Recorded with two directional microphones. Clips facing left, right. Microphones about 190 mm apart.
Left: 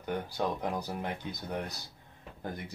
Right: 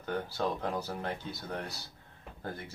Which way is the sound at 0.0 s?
15° left (ahead or behind).